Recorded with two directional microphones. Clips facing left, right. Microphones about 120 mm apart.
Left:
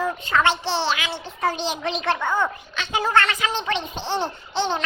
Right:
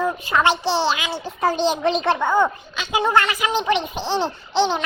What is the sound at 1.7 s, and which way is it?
Speech, 40° right (ahead or behind).